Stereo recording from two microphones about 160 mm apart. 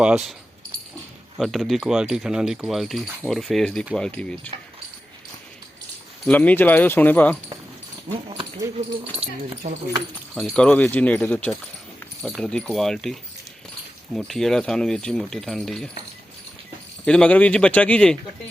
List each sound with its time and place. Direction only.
0.0 s speech: 5° right (ahead or behind)
1.4 s speech: centre (ahead or behind)
6.2 s speech: 10° left (ahead or behind)
9.6 s speech: 65° right (ahead or behind)
10.4 s speech: 5° left (ahead or behind)
17.1 s speech: 5° left (ahead or behind)